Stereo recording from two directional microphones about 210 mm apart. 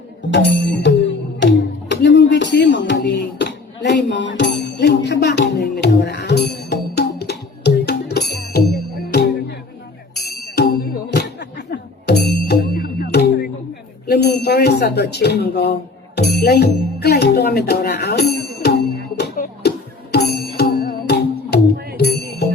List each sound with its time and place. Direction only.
0.3 s music: 55° left (ahead or behind)
14.1 s a sound: 50° left (ahead or behind)
21.9 s music: 50° left (ahead or behind)